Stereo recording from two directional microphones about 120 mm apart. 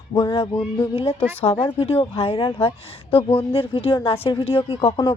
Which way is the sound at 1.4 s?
55° left (ahead or behind).